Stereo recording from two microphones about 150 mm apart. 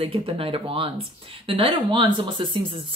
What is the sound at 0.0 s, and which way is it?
Speech, 35° right (ahead or behind).